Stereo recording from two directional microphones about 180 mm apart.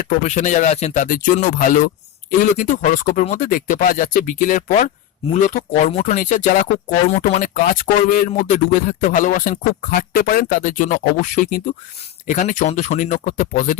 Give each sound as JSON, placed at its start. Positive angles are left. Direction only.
{"t": 0.2, "sound": "speech", "side_deg": 40}